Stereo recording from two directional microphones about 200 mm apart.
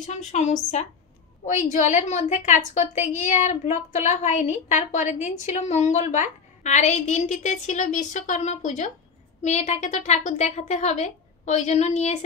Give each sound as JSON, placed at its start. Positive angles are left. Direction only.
{"t": 0.0, "sound": "a woman's voice", "side_deg": 35}